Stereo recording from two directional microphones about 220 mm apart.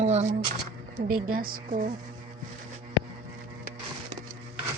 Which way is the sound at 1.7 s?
35° right (ahead or behind).